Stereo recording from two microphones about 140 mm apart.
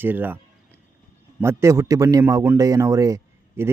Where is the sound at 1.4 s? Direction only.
20° right (ahead or behind).